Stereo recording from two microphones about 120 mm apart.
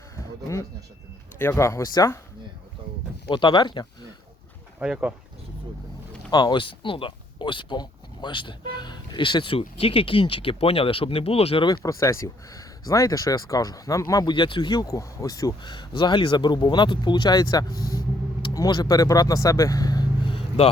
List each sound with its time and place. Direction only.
0.2 s a sound: 25° left (ahead or behind)
1.4 s speech: 20° left (ahead or behind)
3.2 s speech: 40° left (ahead or behind)
4.8 s speech: 10° right (ahead or behind)
6.3 s speech: 40° left (ahead or behind); by 11.6 s 55° left (ahead or behind)
11.8 s speech: 25° left (ahead or behind)
20.6 s speech: 60° left (ahead or behind)